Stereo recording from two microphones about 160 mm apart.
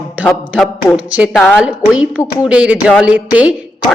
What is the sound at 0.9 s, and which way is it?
A woman's voice, 5° right (ahead or behind).